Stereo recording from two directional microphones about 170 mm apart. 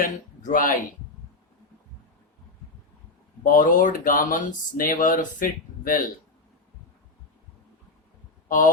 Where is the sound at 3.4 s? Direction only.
55° left (ahead or behind).